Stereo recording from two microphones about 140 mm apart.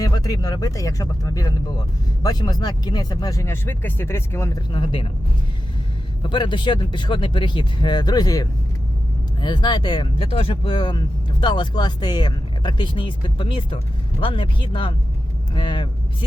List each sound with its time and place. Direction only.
0.0 s speech: 25° left (ahead or behind)
4.7 s speech: 40° left (ahead or behind)
6.2 s speech: 35° left (ahead or behind)